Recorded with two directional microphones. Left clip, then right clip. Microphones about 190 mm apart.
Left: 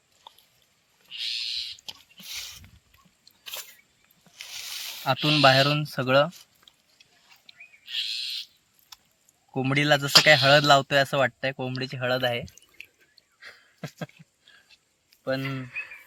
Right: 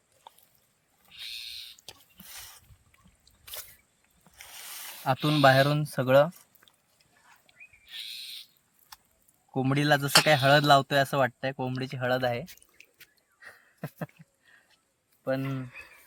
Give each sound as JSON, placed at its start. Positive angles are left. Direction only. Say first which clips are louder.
{"t": 1.1, "sound": "owl", "louder": "left 9 dB", "side_deg": -60}
{"t": 5.0, "sound": "speech", "louder": "left 2 dB", "side_deg": 0}
{"t": 5.8, "sound": "speech", "louder": "even", "side_deg": -15}
{"t": 9.5, "sound": "speech", "louder": "left 3 dB", "side_deg": -5}
{"t": 12.8, "sound": "drip", "louder": "left 10 dB", "side_deg": -10}
{"t": 13.4, "sound": "a sound", "louder": "left 2 dB", "side_deg": 0}
{"t": 15.2, "sound": "speech", "louder": "left 2 dB", "side_deg": 5}